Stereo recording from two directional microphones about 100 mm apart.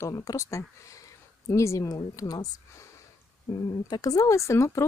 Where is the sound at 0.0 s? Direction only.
35° left (ahead or behind).